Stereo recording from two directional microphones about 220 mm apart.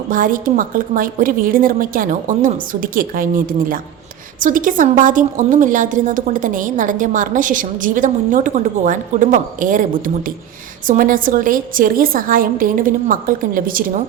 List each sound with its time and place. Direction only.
0.1 s a woman's voice: 40° right (ahead or behind)